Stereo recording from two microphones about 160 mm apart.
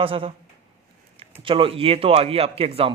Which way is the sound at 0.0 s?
35° right (ahead or behind).